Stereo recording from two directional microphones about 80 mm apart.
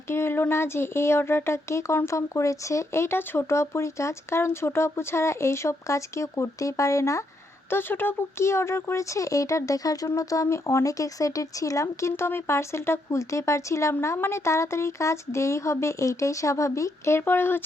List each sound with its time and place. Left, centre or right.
0.1 s speech: left
7.7 s speech: left